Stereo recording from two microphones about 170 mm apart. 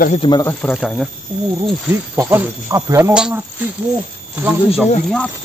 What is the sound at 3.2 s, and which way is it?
Speech, 5° right (ahead or behind).